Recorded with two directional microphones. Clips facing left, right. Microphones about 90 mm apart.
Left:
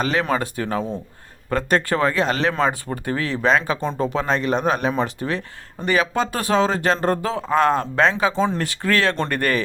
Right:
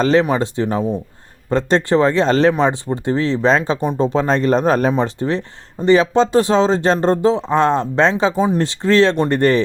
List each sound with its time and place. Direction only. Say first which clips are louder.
0.0 s speech: right 6 dB; 30° right (ahead or behind)
4.9 s a man's voice: right 5 dB; 30° right (ahead or behind)
9.4 s speech: right 8 dB; 25° right (ahead or behind)